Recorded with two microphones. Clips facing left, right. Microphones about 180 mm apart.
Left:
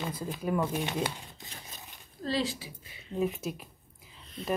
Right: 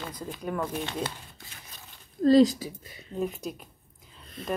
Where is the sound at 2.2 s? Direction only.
45° right (ahead or behind).